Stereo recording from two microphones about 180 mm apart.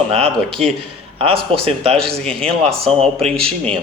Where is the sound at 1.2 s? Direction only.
30° right (ahead or behind).